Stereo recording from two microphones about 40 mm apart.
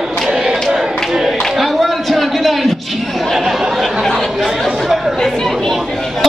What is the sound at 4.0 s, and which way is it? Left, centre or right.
Chatter, centre.